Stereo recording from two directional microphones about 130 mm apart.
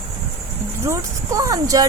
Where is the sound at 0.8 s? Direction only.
20° right (ahead or behind).